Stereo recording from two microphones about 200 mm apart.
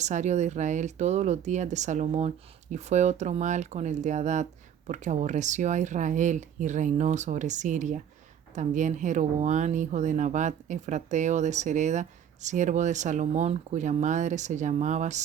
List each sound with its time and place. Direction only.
0.0 s speech: 35° right (ahead or behind)